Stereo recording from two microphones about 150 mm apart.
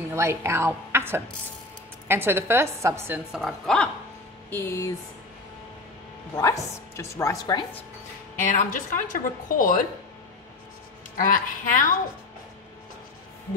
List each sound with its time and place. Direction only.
0.1 s a woman's voice: 20° right (ahead or behind)
3.3 s a woman's voice: centre (ahead or behind); by 4.9 s 15° left (ahead or behind)
6.3 s a woman's voice: 20° left (ahead or behind)
8.4 s speech: 65° left (ahead or behind)
11.1 s speech: 65° left (ahead or behind)